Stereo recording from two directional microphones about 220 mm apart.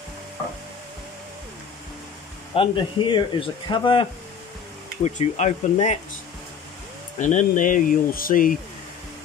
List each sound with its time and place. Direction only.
2.5 s speech: 25° left (ahead or behind)
7.2 s speech: 35° left (ahead or behind)